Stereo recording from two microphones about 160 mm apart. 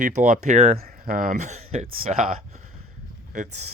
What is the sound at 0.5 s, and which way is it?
Speech, 40° right (ahead or behind).